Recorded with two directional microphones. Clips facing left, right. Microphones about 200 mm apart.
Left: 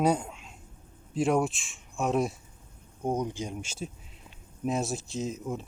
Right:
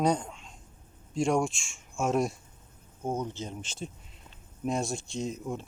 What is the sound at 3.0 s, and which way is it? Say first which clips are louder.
Speech: left 3 dB; 15° left (ahead or behind).